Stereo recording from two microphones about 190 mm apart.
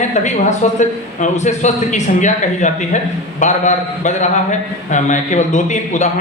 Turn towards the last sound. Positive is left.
turn(degrees=40)  # may be behind; listen again after turning